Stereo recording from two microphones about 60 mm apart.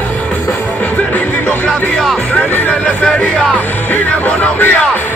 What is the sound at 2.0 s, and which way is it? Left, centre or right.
Music, centre.